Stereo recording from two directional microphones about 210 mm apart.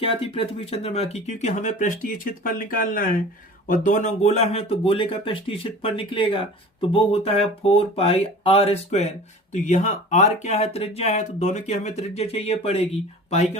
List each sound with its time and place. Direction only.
0.0 s speech: 25° left (ahead or behind)